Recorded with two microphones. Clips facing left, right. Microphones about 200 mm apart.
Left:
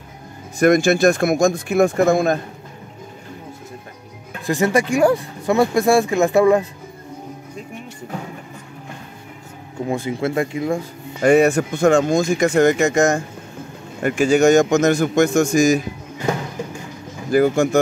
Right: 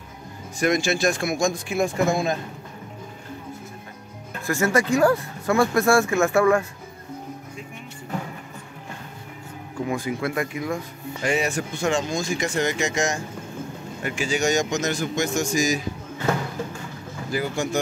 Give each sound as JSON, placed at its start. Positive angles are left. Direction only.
{"t": 0.6, "sound": "speech", "side_deg": 55}
{"t": 4.5, "sound": "speech", "side_deg": 15}
{"t": 9.8, "sound": "speech", "side_deg": 25}
{"t": 11.2, "sound": "speech", "side_deg": 60}
{"t": 17.3, "sound": "speech", "side_deg": 50}